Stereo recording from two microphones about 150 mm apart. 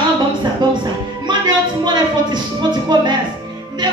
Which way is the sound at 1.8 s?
30° right (ahead or behind).